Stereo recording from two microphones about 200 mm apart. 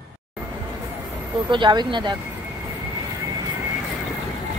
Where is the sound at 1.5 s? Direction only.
25° right (ahead or behind).